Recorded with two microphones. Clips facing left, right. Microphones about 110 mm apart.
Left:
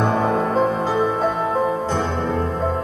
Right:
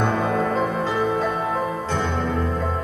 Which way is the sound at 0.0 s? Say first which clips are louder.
Left 2 dB; 35° left (ahead or behind).